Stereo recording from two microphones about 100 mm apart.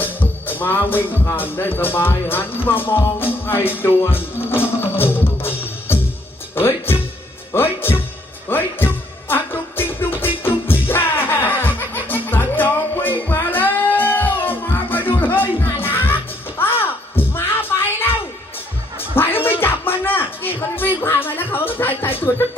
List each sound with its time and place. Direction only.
0.0 s speech: 20° left (ahead or behind)
7.5 s music: 20° left (ahead or behind)
8.4 s speech: 20° left (ahead or behind)
9.3 s music: 20° left (ahead or behind)